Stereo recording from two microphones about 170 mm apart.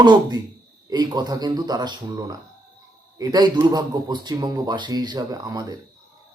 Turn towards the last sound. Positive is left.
turn(degrees=-20)  # may be behind; listen again after turning